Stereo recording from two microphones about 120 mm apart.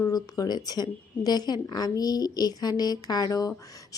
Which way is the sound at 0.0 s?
30° left (ahead or behind).